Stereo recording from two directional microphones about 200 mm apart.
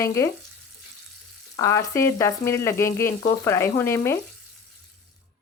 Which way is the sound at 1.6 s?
15° left (ahead or behind).